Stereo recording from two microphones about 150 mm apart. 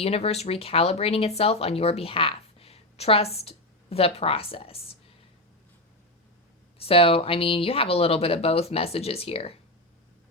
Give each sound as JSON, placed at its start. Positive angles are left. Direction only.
{"t": 0.0, "sound": "a woman's voice", "side_deg": 45}
{"t": 6.7, "sound": "speech", "side_deg": 40}